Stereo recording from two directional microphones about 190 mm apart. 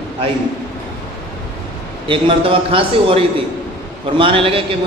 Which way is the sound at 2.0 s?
30° right (ahead or behind).